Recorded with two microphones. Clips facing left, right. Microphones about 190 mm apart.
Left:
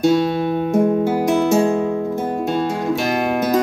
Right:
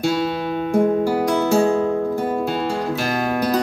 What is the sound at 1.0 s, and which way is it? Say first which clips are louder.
Music: left 2 dB; 20° left (ahead or behind).